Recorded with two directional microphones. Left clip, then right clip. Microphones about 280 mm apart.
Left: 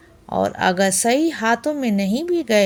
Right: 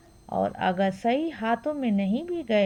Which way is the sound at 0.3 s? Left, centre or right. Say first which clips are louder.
Left 7 dB; right.